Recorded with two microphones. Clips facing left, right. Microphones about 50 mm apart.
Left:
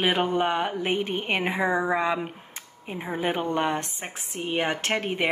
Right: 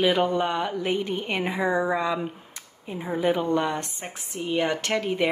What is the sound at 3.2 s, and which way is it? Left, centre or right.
Speech, left.